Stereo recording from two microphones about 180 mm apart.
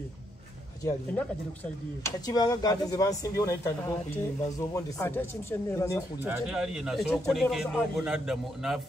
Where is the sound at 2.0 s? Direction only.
20° left (ahead or behind).